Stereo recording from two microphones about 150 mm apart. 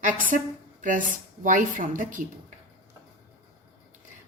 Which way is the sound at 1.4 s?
60° right (ahead or behind).